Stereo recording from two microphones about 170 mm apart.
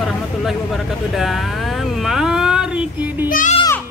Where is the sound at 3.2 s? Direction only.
50° left (ahead or behind).